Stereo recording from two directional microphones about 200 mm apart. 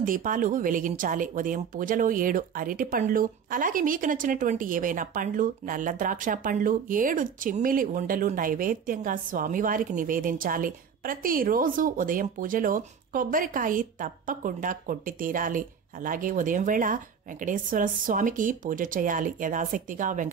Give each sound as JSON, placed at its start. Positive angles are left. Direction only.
{"t": 0.0, "sound": "a woman's voice", "side_deg": -45}